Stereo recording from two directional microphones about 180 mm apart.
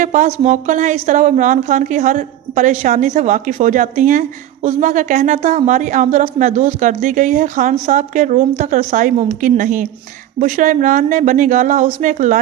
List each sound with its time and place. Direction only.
0.0 s a woman's voice: 45° right (ahead or behind)